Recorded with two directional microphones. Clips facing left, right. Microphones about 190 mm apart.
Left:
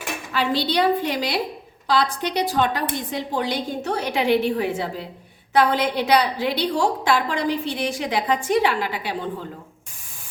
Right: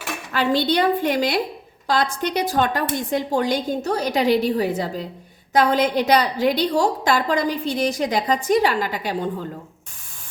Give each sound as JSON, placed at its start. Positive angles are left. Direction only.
{"t": 0.3, "sound": "a woman's voice", "side_deg": -50}